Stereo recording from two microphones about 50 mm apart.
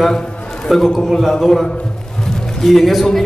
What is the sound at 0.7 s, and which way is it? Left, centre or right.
A man's voice, centre.